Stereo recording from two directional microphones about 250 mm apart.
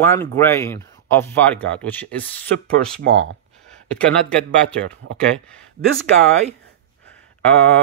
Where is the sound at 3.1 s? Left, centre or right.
Right.